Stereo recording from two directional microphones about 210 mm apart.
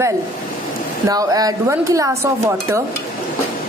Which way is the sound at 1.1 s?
15° right (ahead or behind).